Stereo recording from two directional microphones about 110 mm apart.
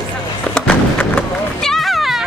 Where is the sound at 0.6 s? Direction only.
15° left (ahead or behind).